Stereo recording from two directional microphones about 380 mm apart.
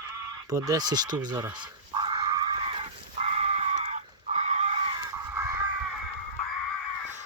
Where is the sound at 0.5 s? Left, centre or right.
Centre.